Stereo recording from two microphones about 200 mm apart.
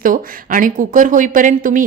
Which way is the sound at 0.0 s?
45° right (ahead or behind).